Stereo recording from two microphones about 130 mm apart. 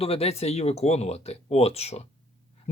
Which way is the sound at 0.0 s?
50° left (ahead or behind).